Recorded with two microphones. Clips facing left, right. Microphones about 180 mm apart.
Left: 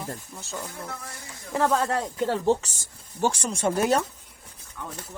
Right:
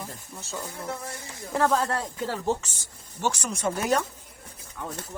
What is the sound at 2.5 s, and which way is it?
Speech, 40° left (ahead or behind).